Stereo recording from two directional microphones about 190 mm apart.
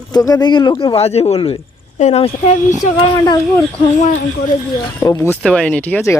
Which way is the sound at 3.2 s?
20° left (ahead or behind).